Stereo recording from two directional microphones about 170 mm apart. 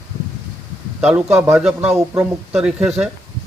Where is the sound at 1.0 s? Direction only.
5° right (ahead or behind).